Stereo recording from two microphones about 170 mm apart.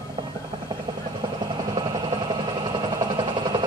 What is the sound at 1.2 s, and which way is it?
Vehicle, 25° right (ahead or behind).